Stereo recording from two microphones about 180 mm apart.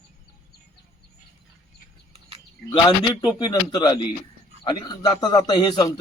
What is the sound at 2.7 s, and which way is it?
A man's voice, 30° left (ahead or behind).